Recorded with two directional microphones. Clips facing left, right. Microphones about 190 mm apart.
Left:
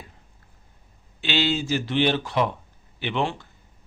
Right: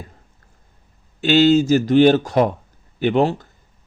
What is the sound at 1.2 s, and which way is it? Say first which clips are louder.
Speech: right 12 dB; 45° right (ahead or behind).